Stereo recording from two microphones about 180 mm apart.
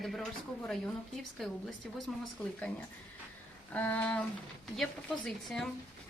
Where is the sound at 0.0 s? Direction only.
Centre (ahead or behind).